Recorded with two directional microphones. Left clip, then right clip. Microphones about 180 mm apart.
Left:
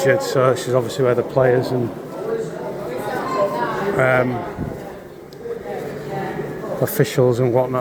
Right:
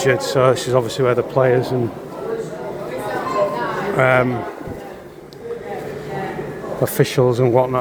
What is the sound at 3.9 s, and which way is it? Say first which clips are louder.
Speech: right 2 dB; 30° right (ahead or behind).